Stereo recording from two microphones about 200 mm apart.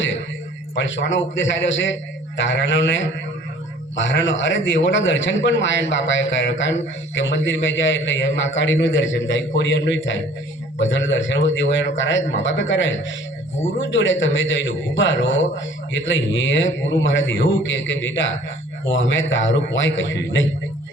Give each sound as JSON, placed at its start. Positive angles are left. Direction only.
{"t": 0.8, "sound": "a man's voice", "side_deg": 65}